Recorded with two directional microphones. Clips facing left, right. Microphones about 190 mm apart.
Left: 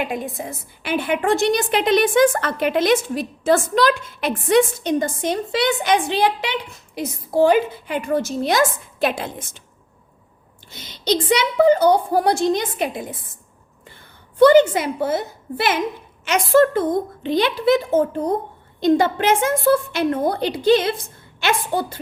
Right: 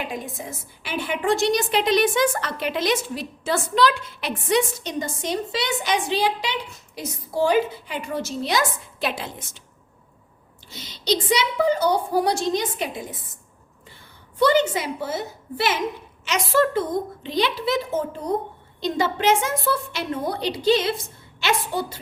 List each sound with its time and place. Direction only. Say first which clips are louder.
0.0 s a woman's voice: left 5 dB; 60° left (ahead or behind)
10.7 s a woman's voice: left 3 dB; 55° left (ahead or behind)
14.3 s a woman's voice: left 7 dB; 55° left (ahead or behind)